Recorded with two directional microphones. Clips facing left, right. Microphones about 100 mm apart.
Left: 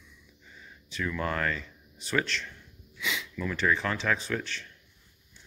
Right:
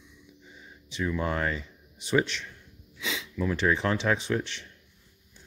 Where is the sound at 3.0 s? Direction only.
30° right (ahead or behind).